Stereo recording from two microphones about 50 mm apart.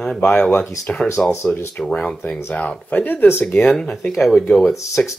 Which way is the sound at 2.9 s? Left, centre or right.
Left.